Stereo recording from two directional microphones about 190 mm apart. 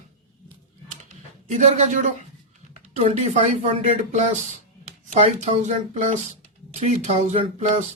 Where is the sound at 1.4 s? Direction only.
40° right (ahead or behind).